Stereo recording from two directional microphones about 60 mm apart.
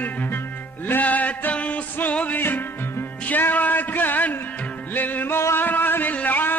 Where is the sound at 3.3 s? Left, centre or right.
Left.